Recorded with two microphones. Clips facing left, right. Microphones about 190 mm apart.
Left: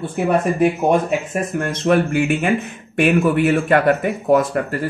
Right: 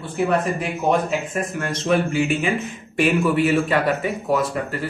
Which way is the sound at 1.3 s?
50° left (ahead or behind).